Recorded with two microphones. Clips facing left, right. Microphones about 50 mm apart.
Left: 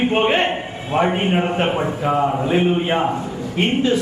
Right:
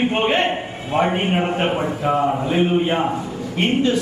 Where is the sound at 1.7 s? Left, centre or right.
Left.